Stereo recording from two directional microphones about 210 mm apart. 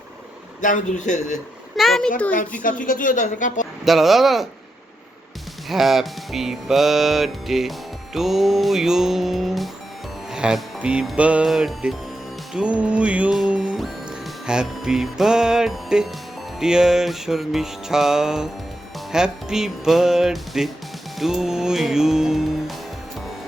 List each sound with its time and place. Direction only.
0.6 s speech: 35° left (ahead or behind)
1.7 s a child's voice: centre (ahead or behind)
2.6 s speech: 40° left (ahead or behind)
3.8 s music: centre (ahead or behind)
5.6 s music: centre (ahead or behind)